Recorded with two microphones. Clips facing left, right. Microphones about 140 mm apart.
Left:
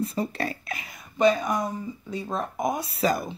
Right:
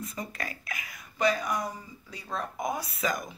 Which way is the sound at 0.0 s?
30° left (ahead or behind).